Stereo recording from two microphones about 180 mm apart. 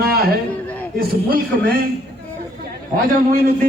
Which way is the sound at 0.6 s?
10° left (ahead or behind).